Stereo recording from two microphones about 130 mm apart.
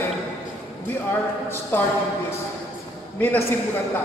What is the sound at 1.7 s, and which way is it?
Speech, 15° left (ahead or behind).